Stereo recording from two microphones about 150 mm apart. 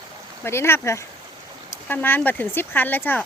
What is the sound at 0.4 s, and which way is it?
Speech, 15° left (ahead or behind).